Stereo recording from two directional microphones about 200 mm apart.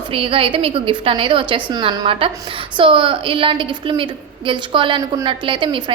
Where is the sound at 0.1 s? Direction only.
25° right (ahead or behind).